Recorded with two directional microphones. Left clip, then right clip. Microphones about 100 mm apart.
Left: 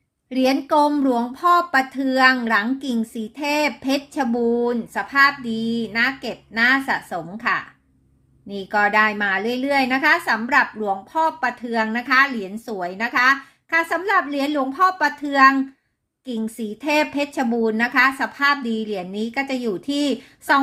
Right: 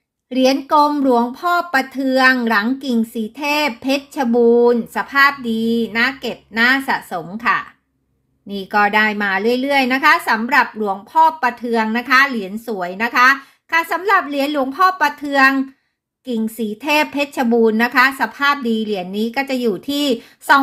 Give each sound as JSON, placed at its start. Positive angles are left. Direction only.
{"t": 0.3, "sound": "speech", "side_deg": -25}